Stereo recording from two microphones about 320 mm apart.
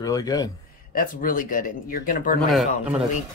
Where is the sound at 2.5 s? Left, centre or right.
Centre.